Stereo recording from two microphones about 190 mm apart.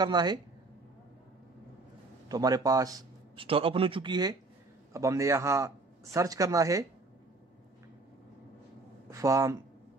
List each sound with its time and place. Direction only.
0.0 s a man's voice: 20° right (ahead or behind)
2.2 s a man's voice: 20° right (ahead or behind)
9.1 s speech: 15° right (ahead or behind)